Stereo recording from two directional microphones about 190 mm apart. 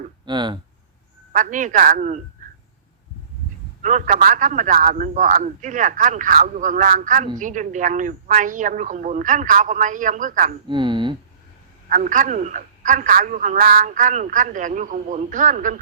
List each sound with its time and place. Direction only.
0.3 s speech: 25° right (ahead or behind)
1.3 s a man's voice: 40° right (ahead or behind)
3.8 s a man's voice: 40° right (ahead or behind)
10.7 s speech: 25° right (ahead or behind)
11.9 s a man's voice: 45° right (ahead or behind)